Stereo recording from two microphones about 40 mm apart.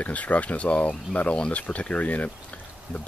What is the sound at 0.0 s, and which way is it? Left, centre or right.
Speech, left.